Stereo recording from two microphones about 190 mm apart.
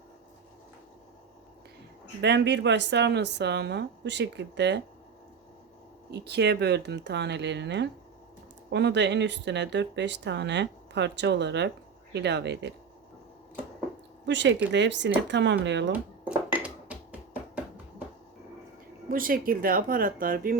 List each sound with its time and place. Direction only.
2.2 s speech: 65° right (ahead or behind)
6.1 s speech: 60° right (ahead or behind)
14.3 s speech: 70° right (ahead or behind)
16.5 s a sound: 5° right (ahead or behind)
19.0 s speech: 50° right (ahead or behind)